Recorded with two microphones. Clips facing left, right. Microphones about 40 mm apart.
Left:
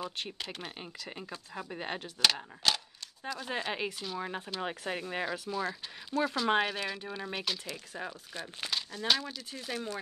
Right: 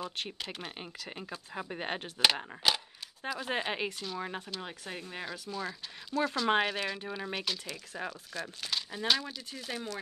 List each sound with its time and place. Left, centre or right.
0.0 s speech: centre
1.6 s speech: centre
4.0 s speech: centre
4.4 s speech: centre
4.6 s speech: left
5.5 s speech: centre
8.1 s speech: centre
9.0 s speech: centre